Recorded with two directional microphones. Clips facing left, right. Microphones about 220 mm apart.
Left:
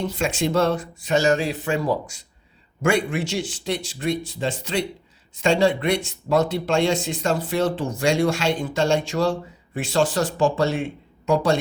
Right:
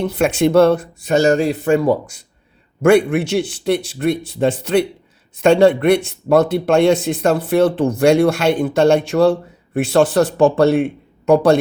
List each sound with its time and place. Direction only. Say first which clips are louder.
0.0 s a man's voice: right 8 dB; 60° right (ahead or behind)
1.2 s a man's voice: right 8 dB; 40° right (ahead or behind); by 11.6 s 60° right (ahead or behind)